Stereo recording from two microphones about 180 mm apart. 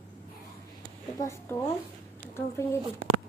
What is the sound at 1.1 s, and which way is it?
A woman's voice, 15° left (ahead or behind).